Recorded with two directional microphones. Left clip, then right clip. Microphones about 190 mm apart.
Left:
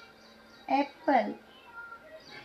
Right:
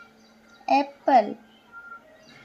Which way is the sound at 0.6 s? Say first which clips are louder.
Right 7 dB; 55° right (ahead or behind).